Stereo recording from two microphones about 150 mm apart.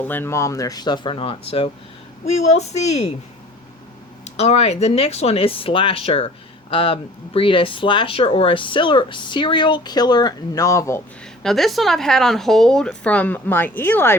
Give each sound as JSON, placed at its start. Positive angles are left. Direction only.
{"t": 0.0, "sound": "speech", "side_deg": 15}
{"t": 4.4, "sound": "speech", "side_deg": 45}
{"t": 11.4, "sound": "speech", "side_deg": 0}